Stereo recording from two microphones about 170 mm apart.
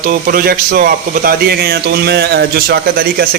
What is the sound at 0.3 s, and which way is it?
A man's voice, 60° right (ahead or behind).